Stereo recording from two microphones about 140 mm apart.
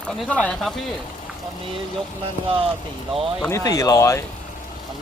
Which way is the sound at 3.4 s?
25° left (ahead or behind).